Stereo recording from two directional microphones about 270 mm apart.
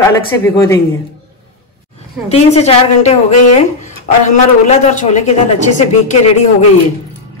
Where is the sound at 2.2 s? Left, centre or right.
Left.